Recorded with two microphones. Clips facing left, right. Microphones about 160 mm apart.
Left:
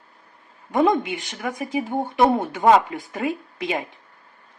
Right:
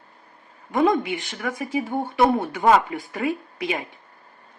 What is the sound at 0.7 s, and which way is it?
Speech, 20° left (ahead or behind).